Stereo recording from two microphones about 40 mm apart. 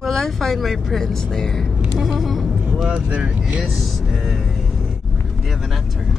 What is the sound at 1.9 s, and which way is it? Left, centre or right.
Vehicle, centre.